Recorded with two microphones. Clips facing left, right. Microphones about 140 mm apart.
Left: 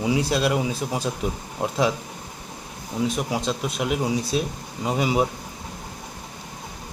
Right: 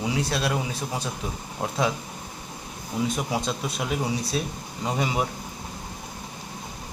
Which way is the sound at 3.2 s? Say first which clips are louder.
Left 2 dB; centre (ahead or behind).